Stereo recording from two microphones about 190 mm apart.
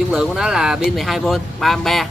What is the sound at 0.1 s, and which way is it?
Speech, 5° right (ahead or behind).